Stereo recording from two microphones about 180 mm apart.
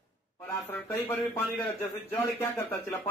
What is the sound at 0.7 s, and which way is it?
Speech, 10° left (ahead or behind).